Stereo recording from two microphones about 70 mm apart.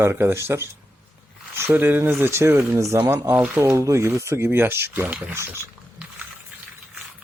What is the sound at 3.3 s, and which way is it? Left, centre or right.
Speech, right.